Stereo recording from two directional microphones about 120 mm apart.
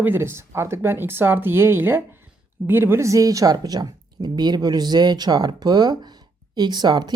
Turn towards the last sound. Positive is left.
turn(degrees=-35)  # may be behind; listen again after turning